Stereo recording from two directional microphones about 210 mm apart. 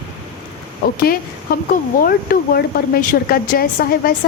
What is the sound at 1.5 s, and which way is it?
A woman's voice, 45° left (ahead or behind).